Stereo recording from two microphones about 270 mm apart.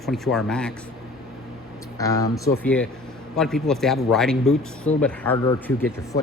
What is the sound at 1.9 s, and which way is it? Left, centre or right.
Speech, centre.